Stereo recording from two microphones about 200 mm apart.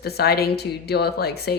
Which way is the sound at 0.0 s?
55° left (ahead or behind).